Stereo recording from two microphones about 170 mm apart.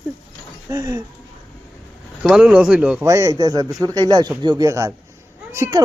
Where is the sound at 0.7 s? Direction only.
20° right (ahead or behind).